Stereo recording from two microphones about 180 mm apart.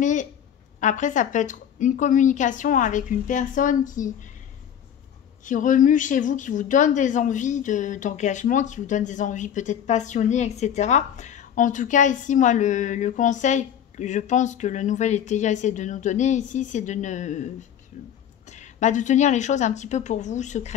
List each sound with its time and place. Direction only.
0.0 s a sound: 45° left (ahead or behind)
0.7 s speech: 45° left (ahead or behind)
5.4 s a woman's voice: 45° left (ahead or behind)